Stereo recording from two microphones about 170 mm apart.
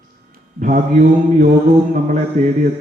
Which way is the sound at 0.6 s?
50° right (ahead or behind).